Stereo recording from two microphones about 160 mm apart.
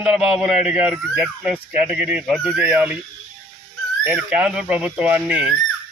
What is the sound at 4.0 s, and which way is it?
Speech, 10° right (ahead or behind).